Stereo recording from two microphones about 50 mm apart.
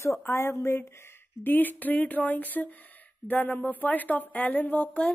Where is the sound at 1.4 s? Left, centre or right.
Left.